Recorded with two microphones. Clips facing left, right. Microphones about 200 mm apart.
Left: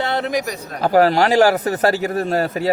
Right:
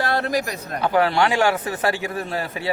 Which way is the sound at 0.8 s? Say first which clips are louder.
Left 5 dB; 40° left (ahead or behind).